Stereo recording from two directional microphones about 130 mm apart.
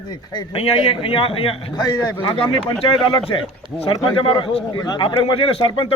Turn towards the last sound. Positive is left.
turn(degrees=45)  # may be behind; listen again after turning